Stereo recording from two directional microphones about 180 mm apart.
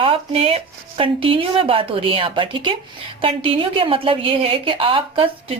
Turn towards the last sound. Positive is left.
turn(degrees=-30)  # may be behind; listen again after turning